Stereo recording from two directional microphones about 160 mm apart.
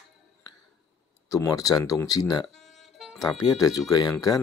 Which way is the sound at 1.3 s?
20° left (ahead or behind).